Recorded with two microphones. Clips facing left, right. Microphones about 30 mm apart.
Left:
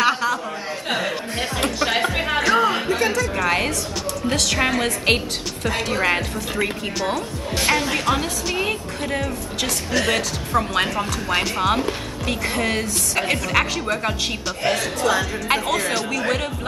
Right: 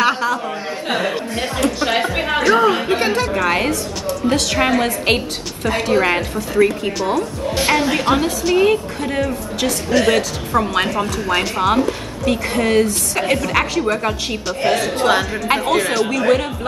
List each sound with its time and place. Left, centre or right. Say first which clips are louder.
0.0 s a sound: right 2 dB; centre
0.8 s chuckle: right 4 dB; centre
1.8 s music: right 2 dB; centre
2.9 s a woman's voice: right 3 dB; right
3.3 s a woman's voice: right 3 dB; centre
15.0 s a woman's voice: right 4 dB; right
15.4 s a woman's voice: right 4 dB; centre